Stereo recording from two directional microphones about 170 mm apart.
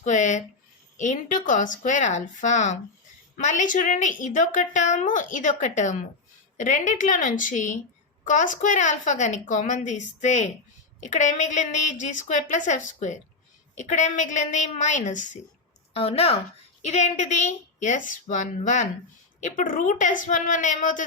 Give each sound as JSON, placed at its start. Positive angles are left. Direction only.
{"t": 0.0, "sound": "a woman's voice", "side_deg": 45}
{"t": 15.9, "sound": "a woman's voice", "side_deg": 35}